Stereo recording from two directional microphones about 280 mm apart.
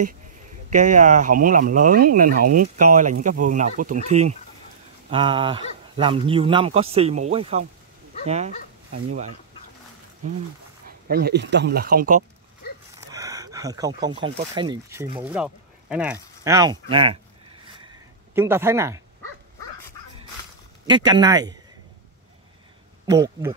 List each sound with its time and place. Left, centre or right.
0.7 s speech: right
10.9 s speech: right
12.9 s speech: centre
18.3 s speech: centre
20.8 s speech: centre
23.1 s speech: centre